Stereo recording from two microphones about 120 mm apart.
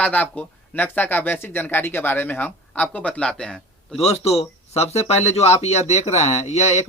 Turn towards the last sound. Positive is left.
turn(degrees=65)  # may be behind; listen again after turning